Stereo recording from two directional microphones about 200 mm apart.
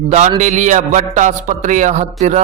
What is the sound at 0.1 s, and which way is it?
Speech, 35° right (ahead or behind).